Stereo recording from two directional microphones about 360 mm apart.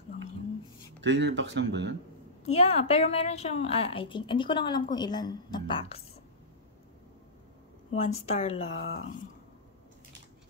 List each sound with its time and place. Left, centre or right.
1.0 s speech: right
2.4 s a woman's voice: centre
8.3 s a woman's voice: centre